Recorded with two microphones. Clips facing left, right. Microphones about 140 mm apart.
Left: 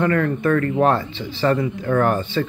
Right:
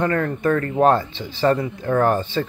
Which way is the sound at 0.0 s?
30° right (ahead or behind).